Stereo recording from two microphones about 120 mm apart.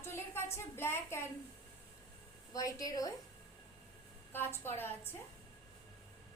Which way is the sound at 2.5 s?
30° left (ahead or behind).